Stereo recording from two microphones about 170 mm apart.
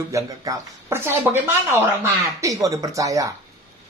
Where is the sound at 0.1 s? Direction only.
20° right (ahead or behind).